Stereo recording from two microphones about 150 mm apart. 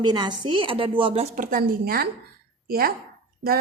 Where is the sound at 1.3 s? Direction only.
65° right (ahead or behind); by 2.9 s 85° right.